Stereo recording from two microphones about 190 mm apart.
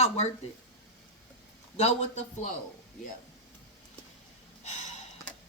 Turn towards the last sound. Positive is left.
turn(degrees=40)  # may be behind; listen again after turning